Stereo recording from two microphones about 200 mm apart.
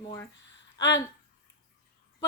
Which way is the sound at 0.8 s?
65° left (ahead or behind).